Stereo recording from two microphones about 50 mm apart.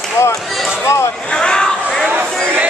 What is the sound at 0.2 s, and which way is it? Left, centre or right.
Speech, left.